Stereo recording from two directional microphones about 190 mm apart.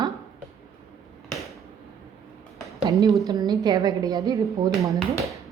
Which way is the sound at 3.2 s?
20° right (ahead or behind).